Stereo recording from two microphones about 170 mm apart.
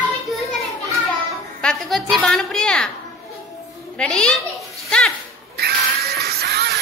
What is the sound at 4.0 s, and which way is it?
Speech, 5° left (ahead or behind).